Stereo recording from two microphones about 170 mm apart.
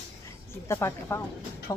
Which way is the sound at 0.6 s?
15° left (ahead or behind).